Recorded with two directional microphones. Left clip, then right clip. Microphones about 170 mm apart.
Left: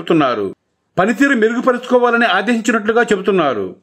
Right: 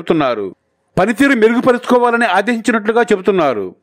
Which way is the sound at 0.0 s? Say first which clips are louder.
Even; 35° right (ahead or behind).